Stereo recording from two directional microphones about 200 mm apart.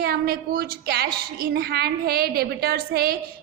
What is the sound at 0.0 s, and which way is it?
A woman's voice, 50° right (ahead or behind).